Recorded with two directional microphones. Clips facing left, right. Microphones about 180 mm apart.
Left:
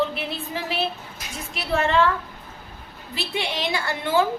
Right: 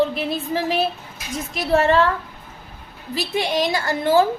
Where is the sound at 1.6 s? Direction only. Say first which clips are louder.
Right 4 dB; 40° right (ahead or behind).